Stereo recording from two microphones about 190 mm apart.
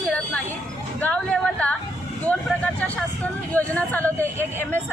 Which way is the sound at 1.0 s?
5° left (ahead or behind).